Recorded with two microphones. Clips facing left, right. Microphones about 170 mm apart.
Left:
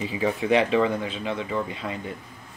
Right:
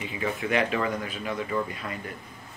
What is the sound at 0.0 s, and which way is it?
Speech, 30° left (ahead or behind).